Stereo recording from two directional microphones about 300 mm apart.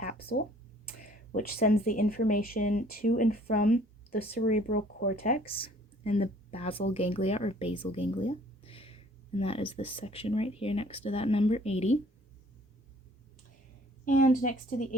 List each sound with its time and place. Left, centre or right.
0.2 s speech: left
14.0 s speech: left